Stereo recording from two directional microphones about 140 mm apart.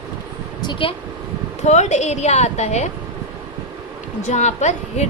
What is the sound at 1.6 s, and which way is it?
A woman's voice, 55° left (ahead or behind).